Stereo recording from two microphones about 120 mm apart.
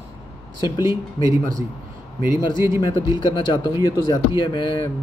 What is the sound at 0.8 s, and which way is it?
Speech, 25° right (ahead or behind).